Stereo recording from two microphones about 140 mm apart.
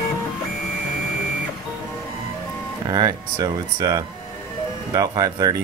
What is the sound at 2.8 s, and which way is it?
Speech, 30° right (ahead or behind).